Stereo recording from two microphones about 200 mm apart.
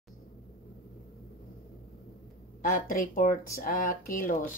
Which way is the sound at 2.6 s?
45° left (ahead or behind).